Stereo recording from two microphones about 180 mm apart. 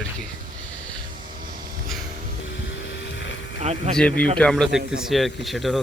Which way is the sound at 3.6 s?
35° right (ahead or behind).